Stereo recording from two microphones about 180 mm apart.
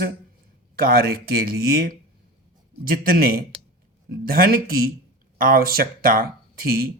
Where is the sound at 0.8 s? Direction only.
55° right (ahead or behind).